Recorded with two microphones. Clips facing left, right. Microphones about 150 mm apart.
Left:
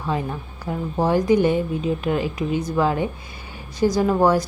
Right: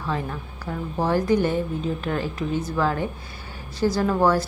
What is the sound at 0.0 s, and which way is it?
A woman's voice, 15° left (ahead or behind).